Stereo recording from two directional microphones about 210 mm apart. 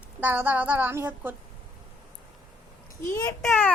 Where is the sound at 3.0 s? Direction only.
10° left (ahead or behind).